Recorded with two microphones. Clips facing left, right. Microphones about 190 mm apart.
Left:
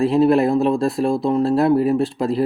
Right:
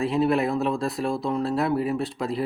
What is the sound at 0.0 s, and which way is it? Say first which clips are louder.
Speech: left 7 dB; 30° left (ahead or behind).